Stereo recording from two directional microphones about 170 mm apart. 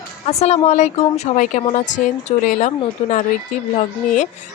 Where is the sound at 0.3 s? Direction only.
40° left (ahead or behind).